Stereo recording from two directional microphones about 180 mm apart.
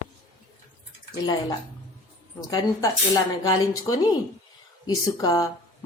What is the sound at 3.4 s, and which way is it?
Speech, 25° left (ahead or behind).